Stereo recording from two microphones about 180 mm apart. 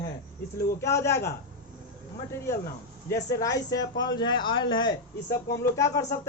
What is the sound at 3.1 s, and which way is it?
Speech, 20° left (ahead or behind).